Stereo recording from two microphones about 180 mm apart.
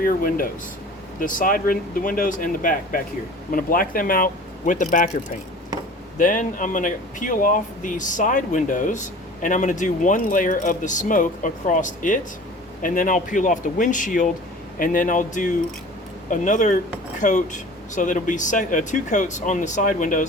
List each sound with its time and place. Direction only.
0.0 s speech: 50° left (ahead or behind)
6.1 s speech: 45° left (ahead or behind)